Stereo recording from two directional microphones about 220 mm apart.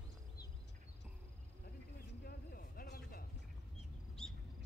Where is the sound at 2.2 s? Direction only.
45° left (ahead or behind).